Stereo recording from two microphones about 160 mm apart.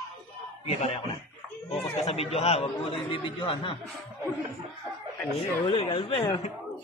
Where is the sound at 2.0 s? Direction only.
40° left (ahead or behind).